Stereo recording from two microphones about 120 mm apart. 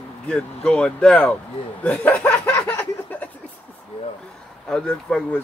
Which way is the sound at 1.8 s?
15° left (ahead or behind).